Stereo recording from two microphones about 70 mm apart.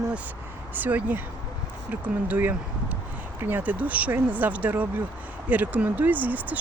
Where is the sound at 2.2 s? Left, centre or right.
Right.